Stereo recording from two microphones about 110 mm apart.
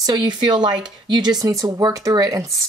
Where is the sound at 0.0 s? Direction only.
40° right (ahead or behind).